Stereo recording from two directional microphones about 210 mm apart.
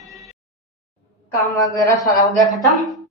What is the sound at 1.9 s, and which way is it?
Speech, 15° left (ahead or behind).